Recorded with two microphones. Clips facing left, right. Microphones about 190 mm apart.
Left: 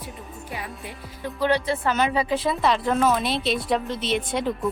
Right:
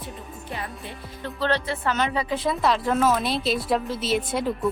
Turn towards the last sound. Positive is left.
turn(degrees=0)  # may be behind; listen again after turning